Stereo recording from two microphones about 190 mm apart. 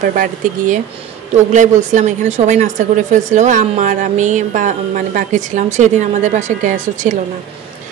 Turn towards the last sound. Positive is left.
turn(degrees=-45)  # may be behind; listen again after turning